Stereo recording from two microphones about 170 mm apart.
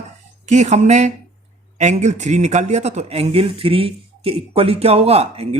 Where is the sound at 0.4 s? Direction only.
45° right (ahead or behind).